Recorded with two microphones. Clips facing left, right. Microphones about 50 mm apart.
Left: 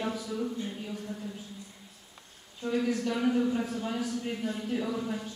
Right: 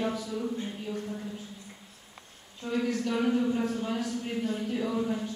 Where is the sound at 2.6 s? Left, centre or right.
Centre.